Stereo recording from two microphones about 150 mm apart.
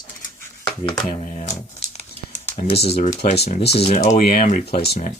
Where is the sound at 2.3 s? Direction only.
55° left (ahead or behind); by 2.8 s 75° left (ahead or behind).